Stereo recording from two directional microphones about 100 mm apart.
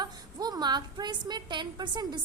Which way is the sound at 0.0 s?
40° right (ahead or behind).